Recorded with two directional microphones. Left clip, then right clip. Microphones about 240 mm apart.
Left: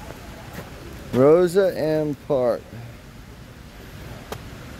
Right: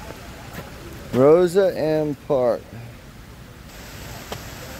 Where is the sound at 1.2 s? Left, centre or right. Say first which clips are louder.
Right 1 dB; centre.